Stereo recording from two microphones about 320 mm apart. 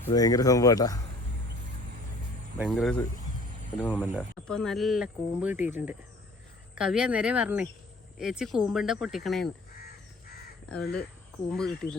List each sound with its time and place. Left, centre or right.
0.1 s speech: centre
2.6 s speech: centre
9.7 s crow: left
11.4 s speech: centre